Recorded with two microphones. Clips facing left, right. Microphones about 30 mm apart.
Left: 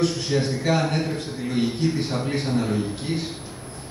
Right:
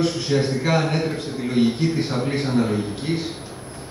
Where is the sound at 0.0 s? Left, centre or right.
Centre.